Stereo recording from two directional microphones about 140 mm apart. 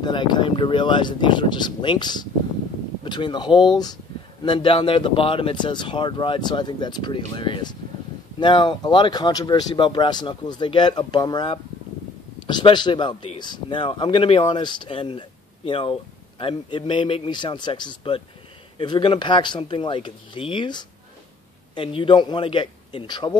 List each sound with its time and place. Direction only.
0.0 s speech: 35° left (ahead or behind)